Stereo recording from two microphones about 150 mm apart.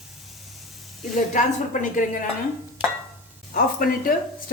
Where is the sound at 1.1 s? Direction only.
55° left (ahead or behind).